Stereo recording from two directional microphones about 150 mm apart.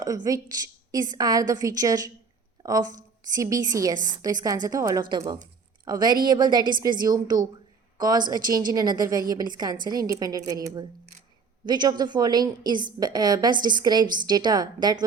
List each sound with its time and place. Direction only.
0.0 s a woman's voice: 25° right (ahead or behind)